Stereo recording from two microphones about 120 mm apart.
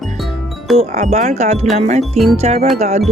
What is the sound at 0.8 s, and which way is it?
Speech, 65° right (ahead or behind).